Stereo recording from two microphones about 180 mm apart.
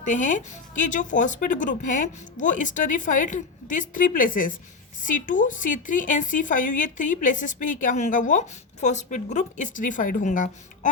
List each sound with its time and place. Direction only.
0.1 s a woman's voice: 45° left (ahead or behind)